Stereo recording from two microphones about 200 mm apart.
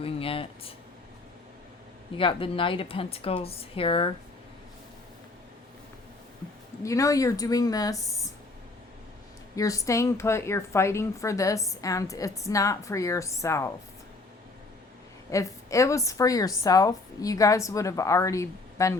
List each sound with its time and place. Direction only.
0.0 s speech: 25° left (ahead or behind)
2.1 s speech: 25° left (ahead or behind)
6.8 s a woman's voice: 15° left (ahead or behind)
9.6 s a woman's voice: 15° left (ahead or behind)
15.3 s a woman's voice: 15° left (ahead or behind)